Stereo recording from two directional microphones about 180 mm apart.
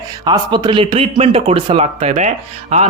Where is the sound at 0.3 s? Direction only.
25° right (ahead or behind).